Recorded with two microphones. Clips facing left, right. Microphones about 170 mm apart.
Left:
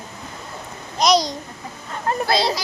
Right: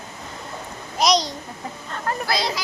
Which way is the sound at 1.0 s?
Centre (ahead or behind).